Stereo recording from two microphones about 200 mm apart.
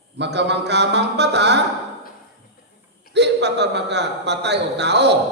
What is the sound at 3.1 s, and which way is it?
A man's voice, 60° right (ahead or behind).